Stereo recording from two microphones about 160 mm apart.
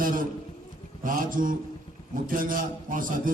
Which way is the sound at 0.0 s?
60° right (ahead or behind).